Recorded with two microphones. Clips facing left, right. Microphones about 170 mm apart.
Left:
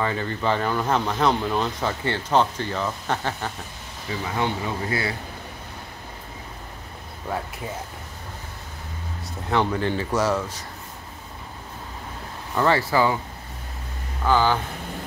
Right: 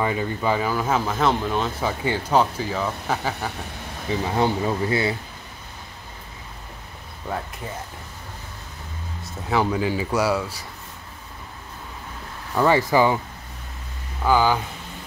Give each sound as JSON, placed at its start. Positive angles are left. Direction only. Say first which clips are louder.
{"t": 0.0, "sound": "speech", "louder": "right 1 dB", "side_deg": -10}
{"t": 4.2, "sound": "speech", "louder": "right 4 dB", "side_deg": -35}
{"t": 9.5, "sound": "speech", "louder": "right 1 dB", "side_deg": -5}
{"t": 12.5, "sound": "speech", "louder": "right 2 dB", "side_deg": -15}
{"t": 14.2, "sound": "speech", "louder": "right 1 dB", "side_deg": -10}